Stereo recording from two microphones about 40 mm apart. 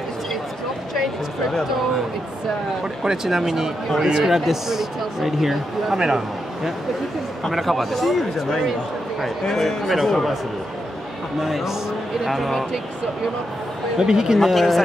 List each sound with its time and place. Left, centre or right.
2.8 s a man's voice: centre
7.5 s speech: centre
11.4 s speech: centre
13.9 s speech: centre
14.4 s speech: centre